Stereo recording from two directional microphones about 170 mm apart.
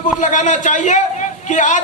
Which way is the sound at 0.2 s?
50° left (ahead or behind).